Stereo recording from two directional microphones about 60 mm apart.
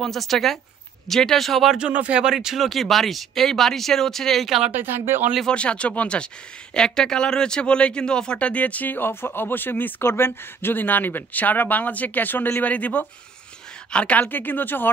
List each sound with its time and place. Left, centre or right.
0.0 s speech: centre
1.8 s speech: centre
4.7 s speech: right
5.5 s speech: centre
14.3 s speech: left